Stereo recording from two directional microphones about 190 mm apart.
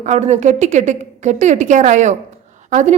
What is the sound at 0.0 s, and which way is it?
A woman's voice, 35° right (ahead or behind).